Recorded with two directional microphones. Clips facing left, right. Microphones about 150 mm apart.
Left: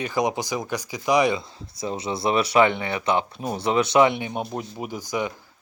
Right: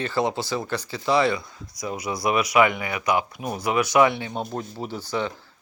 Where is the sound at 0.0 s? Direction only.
15° left (ahead or behind).